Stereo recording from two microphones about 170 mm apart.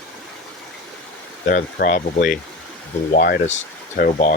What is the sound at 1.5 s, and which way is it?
Speech, 55° left (ahead or behind).